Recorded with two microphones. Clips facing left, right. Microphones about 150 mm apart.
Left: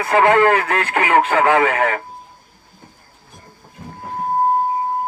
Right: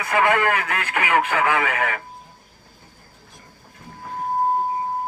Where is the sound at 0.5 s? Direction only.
35° left (ahead or behind).